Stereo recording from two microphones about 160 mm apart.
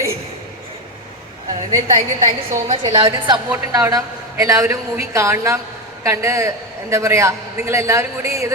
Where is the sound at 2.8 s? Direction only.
25° right (ahead or behind).